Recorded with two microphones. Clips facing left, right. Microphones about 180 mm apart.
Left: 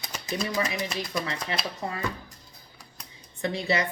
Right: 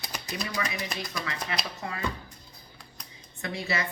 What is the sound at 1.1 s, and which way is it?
Speech, 25° left (ahead or behind).